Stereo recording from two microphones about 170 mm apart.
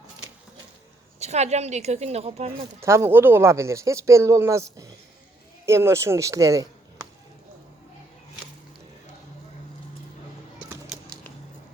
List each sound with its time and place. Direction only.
1.2 s a woman's voice: 40° right (ahead or behind)
2.8 s speech: 15° right (ahead or behind)